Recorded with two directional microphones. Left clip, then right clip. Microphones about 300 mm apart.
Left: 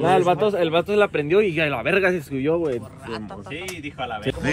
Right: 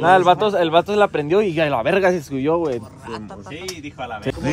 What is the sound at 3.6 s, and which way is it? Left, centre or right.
Speech, left.